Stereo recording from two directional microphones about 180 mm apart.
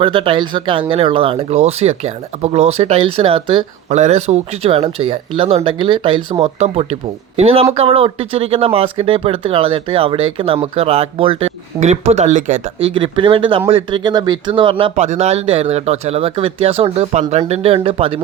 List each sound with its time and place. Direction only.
0.0 s speech: 25° right (ahead or behind)
12.9 s speech: 30° right (ahead or behind)